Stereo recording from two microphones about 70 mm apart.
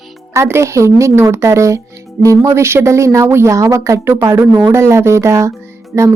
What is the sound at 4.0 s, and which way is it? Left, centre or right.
A woman's voice, right.